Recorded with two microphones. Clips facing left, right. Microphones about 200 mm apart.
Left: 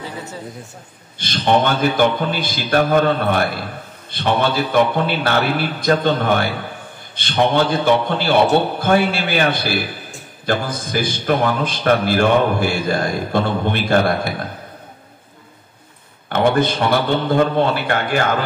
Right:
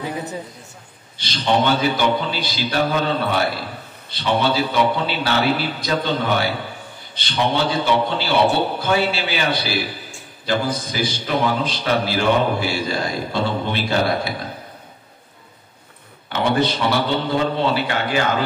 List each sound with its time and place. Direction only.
0.0 s a sound: 15° right (ahead or behind)
1.1 s a man's voice: 50° left (ahead or behind)
16.3 s a man's voice: 50° left (ahead or behind)